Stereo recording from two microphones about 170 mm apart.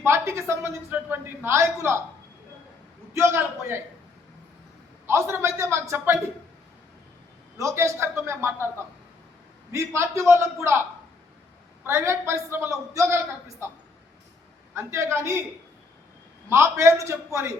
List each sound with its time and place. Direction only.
0.0 s a man's voice: 15° right (ahead or behind)
3.1 s a man's voice: 15° right (ahead or behind)
5.0 s a man's voice: 15° right (ahead or behind)
7.6 s a man's voice: 15° right (ahead or behind)
9.7 s a man's voice: 15° right (ahead or behind)
11.9 s a man's voice: 15° right (ahead or behind)
14.8 s a man's voice: 15° right (ahead or behind)
16.5 s a man's voice: 15° right (ahead or behind)